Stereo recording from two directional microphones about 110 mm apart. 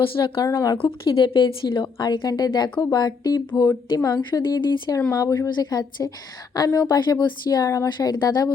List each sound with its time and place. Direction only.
0.0 s a woman's voice: 50° left (ahead or behind)
0.4 s speech: 30° left (ahead or behind)
0.8 s a woman's voice: 50° left (ahead or behind)
7.6 s a woman's voice: 30° left (ahead or behind)
7.9 s speech: 40° left (ahead or behind)